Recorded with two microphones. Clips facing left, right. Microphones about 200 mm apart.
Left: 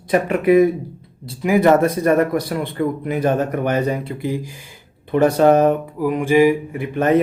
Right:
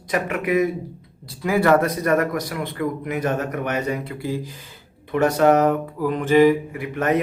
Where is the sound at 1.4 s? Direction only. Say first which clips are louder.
Left 4 dB; 15° left (ahead or behind).